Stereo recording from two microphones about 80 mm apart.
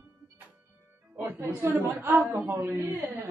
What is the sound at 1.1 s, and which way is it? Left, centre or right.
A woman's voice, right.